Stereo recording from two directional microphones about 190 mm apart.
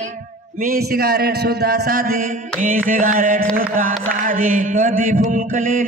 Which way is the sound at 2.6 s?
45° right (ahead or behind).